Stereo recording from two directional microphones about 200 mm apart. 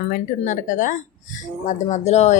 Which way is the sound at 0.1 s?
40° left (ahead or behind).